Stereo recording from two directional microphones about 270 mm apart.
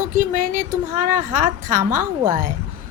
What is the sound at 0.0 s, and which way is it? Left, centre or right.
A woman's voice, right.